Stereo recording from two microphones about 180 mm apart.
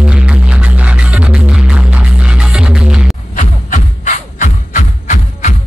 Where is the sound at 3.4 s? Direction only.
45° left (ahead or behind).